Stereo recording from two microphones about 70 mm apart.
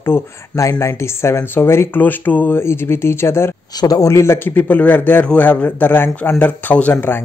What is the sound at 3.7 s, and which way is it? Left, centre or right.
Speech, left.